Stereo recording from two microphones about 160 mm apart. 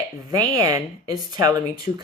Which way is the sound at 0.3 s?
20° right (ahead or behind).